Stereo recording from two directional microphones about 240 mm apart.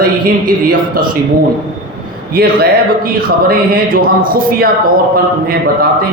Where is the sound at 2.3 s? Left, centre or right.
Right.